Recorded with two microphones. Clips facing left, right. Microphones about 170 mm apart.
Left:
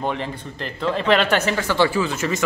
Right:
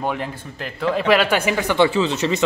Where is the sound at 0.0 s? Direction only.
5° right (ahead or behind).